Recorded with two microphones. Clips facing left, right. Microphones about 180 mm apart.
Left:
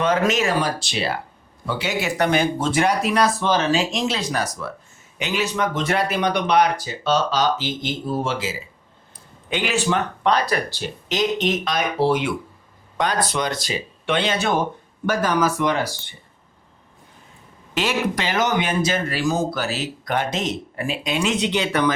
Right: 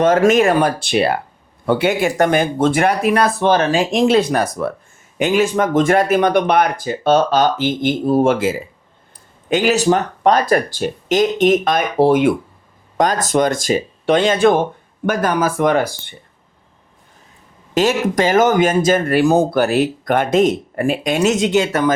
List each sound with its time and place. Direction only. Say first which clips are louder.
0.0 s speech: right 8 dB; 45° right (ahead or behind)
9.5 s speech: right 8 dB; 40° right (ahead or behind)
17.7 s speech: right 7 dB; 45° right (ahead or behind)